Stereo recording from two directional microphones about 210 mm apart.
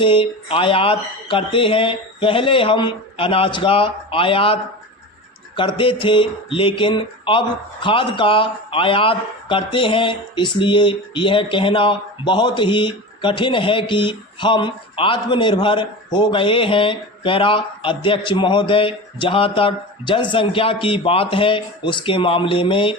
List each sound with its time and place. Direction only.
0.0 s speech: 25° left (ahead or behind)